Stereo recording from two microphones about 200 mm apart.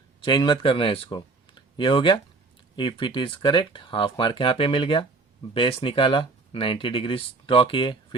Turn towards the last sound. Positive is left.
turn(degrees=25)  # may be behind; listen again after turning